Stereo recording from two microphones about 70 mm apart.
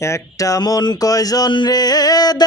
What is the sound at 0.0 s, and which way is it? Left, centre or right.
Speech, left.